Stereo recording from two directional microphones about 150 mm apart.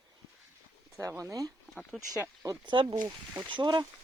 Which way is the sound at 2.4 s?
25° right (ahead or behind).